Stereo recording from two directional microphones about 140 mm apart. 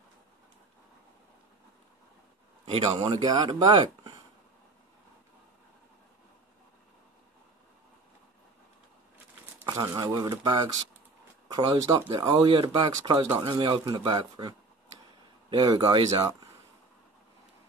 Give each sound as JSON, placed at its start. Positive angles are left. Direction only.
{"t": 2.6, "sound": "speech", "side_deg": -35}
{"t": 9.7, "sound": "speech", "side_deg": -30}
{"t": 15.5, "sound": "speech", "side_deg": -30}